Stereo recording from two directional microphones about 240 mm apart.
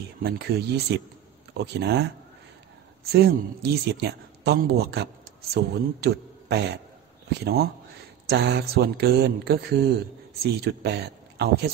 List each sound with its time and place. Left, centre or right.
0.2 s speech: right
3.1 s speech: right